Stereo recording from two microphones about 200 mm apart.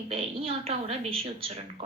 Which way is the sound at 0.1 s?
30° right (ahead or behind).